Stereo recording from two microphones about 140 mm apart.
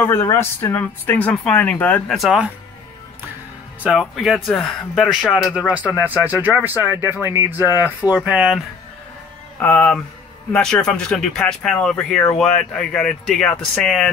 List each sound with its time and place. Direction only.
0.0 s speech: 20° left (ahead or behind)
2.1 s speech: centre (ahead or behind)
3.8 s speech: 5° right (ahead or behind)
9.6 s speech: 10° left (ahead or behind)